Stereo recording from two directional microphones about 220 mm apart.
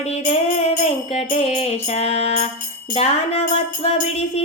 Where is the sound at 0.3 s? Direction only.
30° left (ahead or behind).